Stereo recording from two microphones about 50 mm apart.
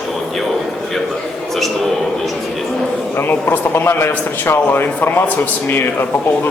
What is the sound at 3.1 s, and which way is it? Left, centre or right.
Speech, left.